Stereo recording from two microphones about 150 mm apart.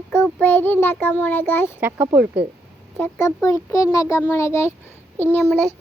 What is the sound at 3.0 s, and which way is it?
A child's voice, 20° left (ahead or behind).